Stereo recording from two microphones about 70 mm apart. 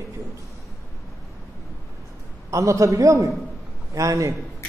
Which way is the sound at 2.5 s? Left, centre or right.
Right.